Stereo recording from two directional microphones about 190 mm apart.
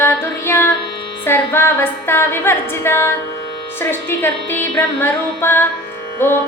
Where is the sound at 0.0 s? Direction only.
10° left (ahead or behind).